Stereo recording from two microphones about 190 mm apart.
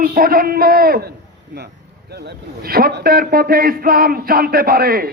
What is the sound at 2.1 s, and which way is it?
A man's voice, 60° right (ahead or behind).